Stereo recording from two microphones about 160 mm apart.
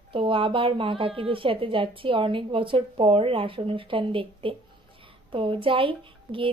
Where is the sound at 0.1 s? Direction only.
35° right (ahead or behind).